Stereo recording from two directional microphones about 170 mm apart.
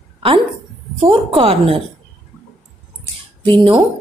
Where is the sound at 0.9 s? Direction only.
35° right (ahead or behind).